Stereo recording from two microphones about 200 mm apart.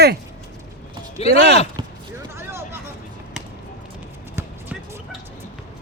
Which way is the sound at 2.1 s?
10° right (ahead or behind).